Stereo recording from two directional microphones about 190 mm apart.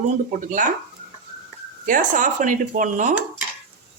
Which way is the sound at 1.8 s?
45° right (ahead or behind).